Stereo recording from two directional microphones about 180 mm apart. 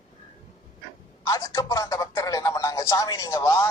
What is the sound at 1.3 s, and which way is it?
Music, 20° left (ahead or behind).